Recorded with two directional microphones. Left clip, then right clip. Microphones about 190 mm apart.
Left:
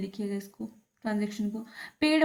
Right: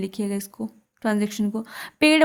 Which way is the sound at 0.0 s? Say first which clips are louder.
Right 7 dB; 45° right (ahead or behind).